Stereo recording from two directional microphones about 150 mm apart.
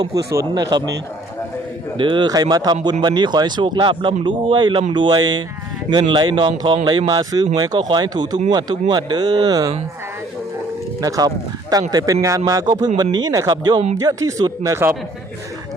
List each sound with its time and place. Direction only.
0.3 s speech: 25° right (ahead or behind)
2.0 s speech: 30° right (ahead or behind)
11.0 s speech: 25° right (ahead or behind)